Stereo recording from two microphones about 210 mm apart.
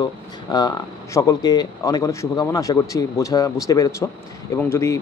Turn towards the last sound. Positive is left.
turn(degrees=15)  # may be behind; listen again after turning